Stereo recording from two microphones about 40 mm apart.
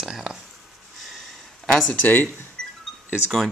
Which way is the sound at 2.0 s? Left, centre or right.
Left.